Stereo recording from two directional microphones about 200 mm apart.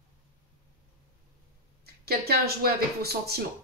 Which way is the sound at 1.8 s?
50° right (ahead or behind).